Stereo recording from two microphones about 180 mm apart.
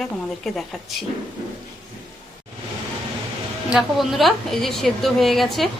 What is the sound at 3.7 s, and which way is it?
A woman's voice, centre (ahead or behind).